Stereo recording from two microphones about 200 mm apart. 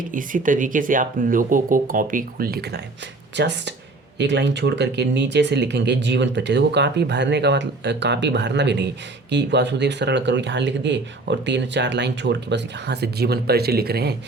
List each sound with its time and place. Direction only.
0.0 s speech: 40° right (ahead or behind)